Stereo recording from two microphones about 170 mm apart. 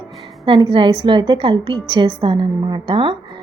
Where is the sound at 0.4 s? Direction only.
30° right (ahead or behind).